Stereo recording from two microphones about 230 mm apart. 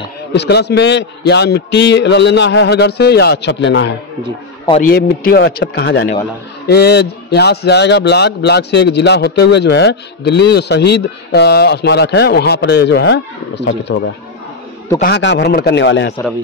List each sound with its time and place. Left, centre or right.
0.3 s a man's voice: left